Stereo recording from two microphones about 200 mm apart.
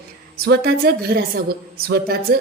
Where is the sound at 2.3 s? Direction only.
50° right (ahead or behind).